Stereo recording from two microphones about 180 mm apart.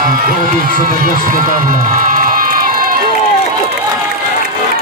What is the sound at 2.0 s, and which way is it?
Crowd, 50° right (ahead or behind).